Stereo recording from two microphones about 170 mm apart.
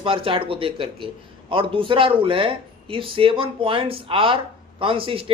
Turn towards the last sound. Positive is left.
turn(degrees=-30)  # may be behind; listen again after turning